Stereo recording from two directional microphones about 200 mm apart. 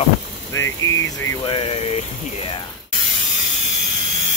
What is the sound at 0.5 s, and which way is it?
Speech, 15° left (ahead or behind).